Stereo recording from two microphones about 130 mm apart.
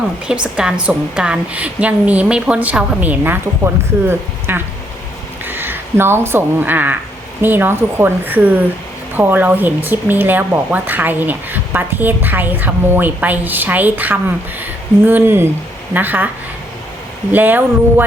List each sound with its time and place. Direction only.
0.3 s speech: 10° right (ahead or behind)
17.3 s speech: 15° right (ahead or behind)